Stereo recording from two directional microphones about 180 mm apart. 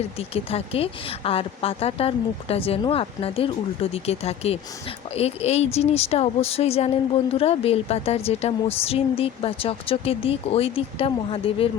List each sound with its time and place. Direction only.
0.2 s speech: 35° left (ahead or behind)